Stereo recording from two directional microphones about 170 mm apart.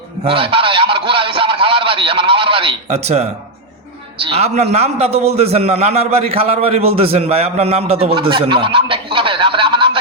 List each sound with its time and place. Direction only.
0.3 s a man's voice: 30° right (ahead or behind)